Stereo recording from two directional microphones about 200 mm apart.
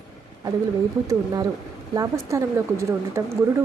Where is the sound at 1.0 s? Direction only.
15° right (ahead or behind).